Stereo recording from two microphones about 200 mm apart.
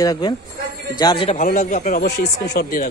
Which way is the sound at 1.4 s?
40° left (ahead or behind).